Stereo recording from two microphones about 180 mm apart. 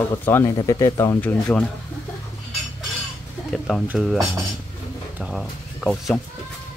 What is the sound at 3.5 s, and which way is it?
Speech, 5° left (ahead or behind).